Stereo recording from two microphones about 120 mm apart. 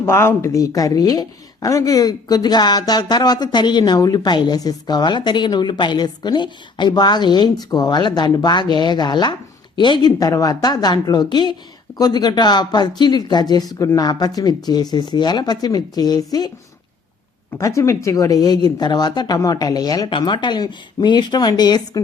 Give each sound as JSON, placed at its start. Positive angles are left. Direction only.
{"t": 0.0, "sound": "a woman's voice", "side_deg": 20}
{"t": 17.6, "sound": "a woman's voice", "side_deg": 25}